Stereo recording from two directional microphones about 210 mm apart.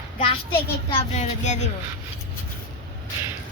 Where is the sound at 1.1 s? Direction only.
35° left (ahead or behind).